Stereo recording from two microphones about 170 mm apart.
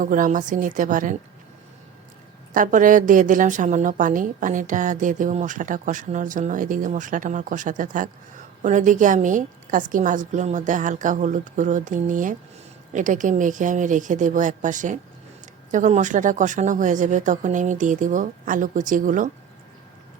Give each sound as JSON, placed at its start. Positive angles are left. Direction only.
{"t": 0.0, "sound": "a woman's voice", "side_deg": -50}
{"t": 2.5, "sound": "a woman's voice", "side_deg": -50}